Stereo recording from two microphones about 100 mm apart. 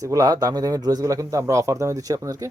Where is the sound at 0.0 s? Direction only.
35° right (ahead or behind).